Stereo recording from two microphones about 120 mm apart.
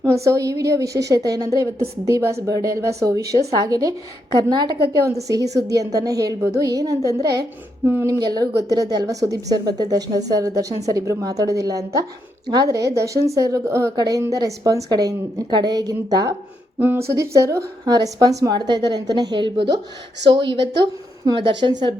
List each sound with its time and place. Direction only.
0.0 s a woman's voice: 25° right (ahead or behind)